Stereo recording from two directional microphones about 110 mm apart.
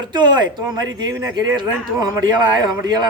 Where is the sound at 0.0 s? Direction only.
40° right (ahead or behind).